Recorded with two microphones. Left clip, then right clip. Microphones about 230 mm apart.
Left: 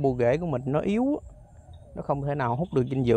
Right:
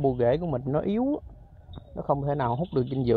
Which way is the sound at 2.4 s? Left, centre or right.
Centre.